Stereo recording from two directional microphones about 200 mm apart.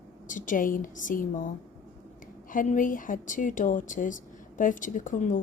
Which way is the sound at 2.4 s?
40° left (ahead or behind).